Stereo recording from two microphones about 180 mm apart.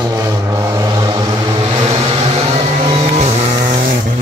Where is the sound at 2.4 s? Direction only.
35° right (ahead or behind).